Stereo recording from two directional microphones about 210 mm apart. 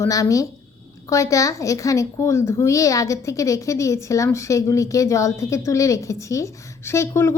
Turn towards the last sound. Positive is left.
turn(degrees=10)  # may be behind; listen again after turning